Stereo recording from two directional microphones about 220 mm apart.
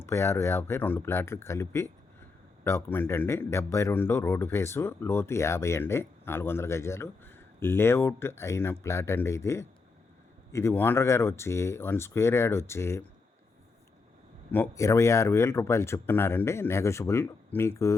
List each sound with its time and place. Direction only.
0.0 s a man's voice: 10° left (ahead or behind)
14.5 s a man's voice: 10° left (ahead or behind)